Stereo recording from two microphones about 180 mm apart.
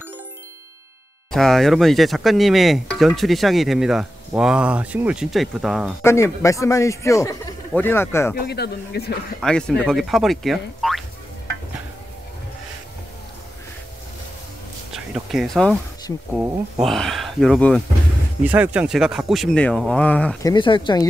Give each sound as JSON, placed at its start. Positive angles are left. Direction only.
{"t": 1.3, "sound": "speech", "side_deg": 0}
{"t": 6.0, "sound": "a man's voice", "side_deg": 15}
{"t": 8.4, "sound": "speech", "side_deg": 65}
{"t": 9.4, "sound": "speech", "side_deg": 5}
{"t": 15.1, "sound": "speech", "side_deg": 0}
{"t": 16.3, "sound": "speech", "side_deg": -15}
{"t": 16.8, "sound": "speech", "side_deg": 0}
{"t": 18.4, "sound": "speech", "side_deg": -10}
{"t": 20.4, "sound": "speech", "side_deg": 25}